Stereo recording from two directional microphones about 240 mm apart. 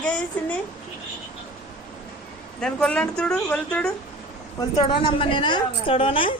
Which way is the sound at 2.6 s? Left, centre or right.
Centre.